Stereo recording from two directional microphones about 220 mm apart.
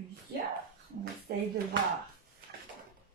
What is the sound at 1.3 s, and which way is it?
Speech, 45° right (ahead or behind).